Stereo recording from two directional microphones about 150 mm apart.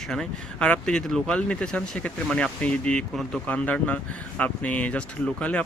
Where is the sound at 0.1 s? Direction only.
5° left (ahead or behind).